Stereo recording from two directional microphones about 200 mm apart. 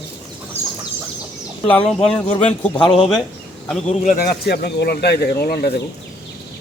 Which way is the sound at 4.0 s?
45° left (ahead or behind).